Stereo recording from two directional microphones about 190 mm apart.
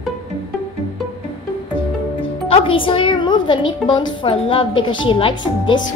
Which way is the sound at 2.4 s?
30° left (ahead or behind).